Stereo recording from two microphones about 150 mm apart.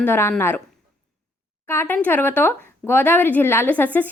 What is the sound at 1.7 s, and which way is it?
A woman's voice, 15° left (ahead or behind).